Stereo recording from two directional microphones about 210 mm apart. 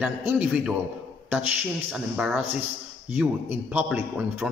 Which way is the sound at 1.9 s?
5° right (ahead or behind).